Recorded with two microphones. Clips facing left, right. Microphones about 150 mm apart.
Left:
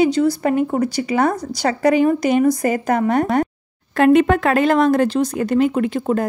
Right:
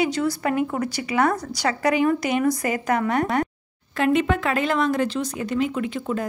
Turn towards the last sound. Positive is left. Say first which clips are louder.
# left 7 dB
turn(degrees=50)  # may be behind; listen again after turning